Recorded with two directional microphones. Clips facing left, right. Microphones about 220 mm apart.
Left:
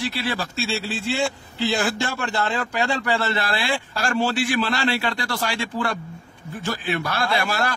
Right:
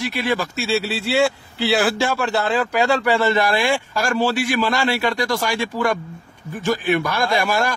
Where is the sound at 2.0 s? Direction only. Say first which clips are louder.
Right 5 dB; 90° right.